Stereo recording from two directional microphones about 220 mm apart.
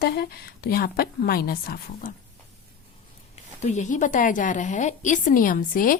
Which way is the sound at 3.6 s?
35° left (ahead or behind).